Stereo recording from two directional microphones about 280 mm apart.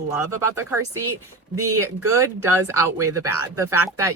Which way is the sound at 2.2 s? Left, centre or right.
Centre.